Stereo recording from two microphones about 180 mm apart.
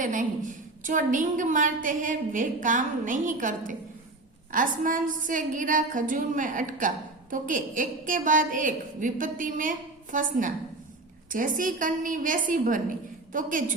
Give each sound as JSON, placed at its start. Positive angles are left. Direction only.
{"t": 0.0, "sound": "a woman's voice", "side_deg": -45}